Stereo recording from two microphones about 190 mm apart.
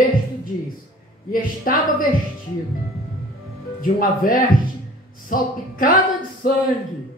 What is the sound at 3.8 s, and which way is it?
Speech, 50° left (ahead or behind).